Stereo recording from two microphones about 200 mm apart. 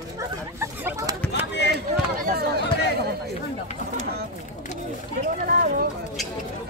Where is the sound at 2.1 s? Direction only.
50° right (ahead or behind).